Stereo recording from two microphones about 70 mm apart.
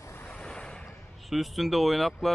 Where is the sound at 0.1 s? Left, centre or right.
Left.